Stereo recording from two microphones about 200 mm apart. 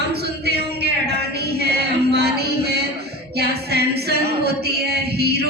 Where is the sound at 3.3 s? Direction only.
55° right (ahead or behind).